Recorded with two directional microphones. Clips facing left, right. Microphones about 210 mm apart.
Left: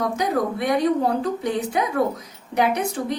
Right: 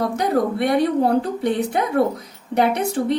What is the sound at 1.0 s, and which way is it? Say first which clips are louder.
Speech: right 3 dB; 30° right (ahead or behind).